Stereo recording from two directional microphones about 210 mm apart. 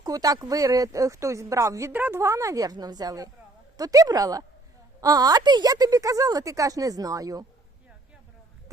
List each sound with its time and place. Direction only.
0.0 s speech: 15° right (ahead or behind)